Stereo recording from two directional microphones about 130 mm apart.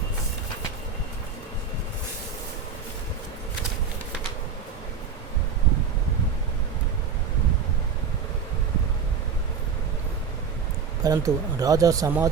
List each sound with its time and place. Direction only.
11.0 s speech: 25° right (ahead or behind)